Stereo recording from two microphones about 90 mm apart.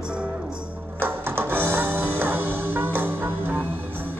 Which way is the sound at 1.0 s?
25° right (ahead or behind).